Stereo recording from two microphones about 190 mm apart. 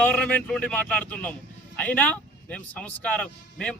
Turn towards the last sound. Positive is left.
turn(degrees=5)  # may be behind; listen again after turning